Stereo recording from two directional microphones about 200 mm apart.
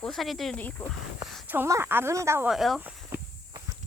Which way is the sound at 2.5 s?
Centre (ahead or behind).